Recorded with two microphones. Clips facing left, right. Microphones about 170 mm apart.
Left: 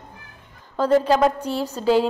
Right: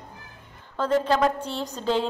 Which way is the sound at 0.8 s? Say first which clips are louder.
Left 5 dB; 10° left (ahead or behind).